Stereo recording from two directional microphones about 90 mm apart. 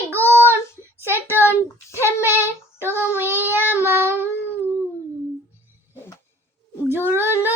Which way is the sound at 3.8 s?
25° right (ahead or behind).